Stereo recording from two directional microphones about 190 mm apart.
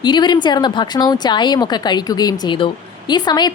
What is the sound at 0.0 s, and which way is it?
A woman's voice, 25° left (ahead or behind).